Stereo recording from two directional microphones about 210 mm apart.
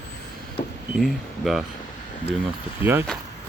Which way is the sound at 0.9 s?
Centre (ahead or behind).